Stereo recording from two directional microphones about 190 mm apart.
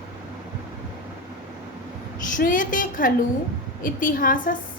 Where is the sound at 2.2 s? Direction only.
45° left (ahead or behind).